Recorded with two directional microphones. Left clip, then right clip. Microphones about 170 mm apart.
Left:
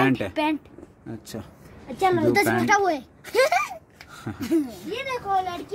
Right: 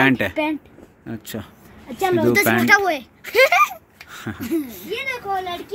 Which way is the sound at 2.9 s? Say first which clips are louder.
Right 3 dB; 25° left (ahead or behind).